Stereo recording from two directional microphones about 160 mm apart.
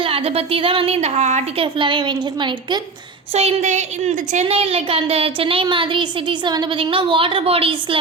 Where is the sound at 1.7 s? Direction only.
30° right (ahead or behind).